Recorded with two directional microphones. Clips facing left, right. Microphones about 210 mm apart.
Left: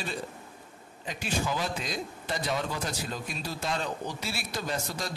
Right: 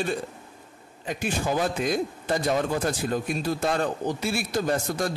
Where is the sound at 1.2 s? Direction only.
50° right (ahead or behind).